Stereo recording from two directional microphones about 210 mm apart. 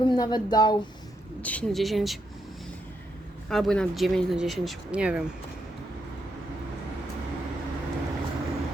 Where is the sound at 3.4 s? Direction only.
Centre (ahead or behind).